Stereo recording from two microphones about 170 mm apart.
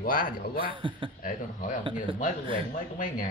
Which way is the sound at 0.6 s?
30° right (ahead or behind).